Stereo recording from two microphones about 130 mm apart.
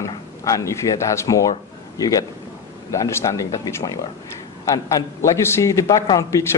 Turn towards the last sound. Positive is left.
turn(degrees=25)  # may be behind; listen again after turning